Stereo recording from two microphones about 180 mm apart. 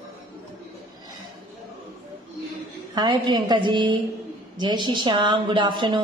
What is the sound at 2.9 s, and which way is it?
Speech, 25° right (ahead or behind).